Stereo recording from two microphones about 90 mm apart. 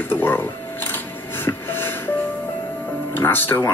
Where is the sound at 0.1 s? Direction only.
25° left (ahead or behind).